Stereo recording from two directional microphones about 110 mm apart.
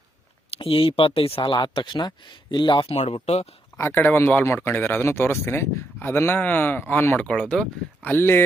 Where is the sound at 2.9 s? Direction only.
70° left (ahead or behind).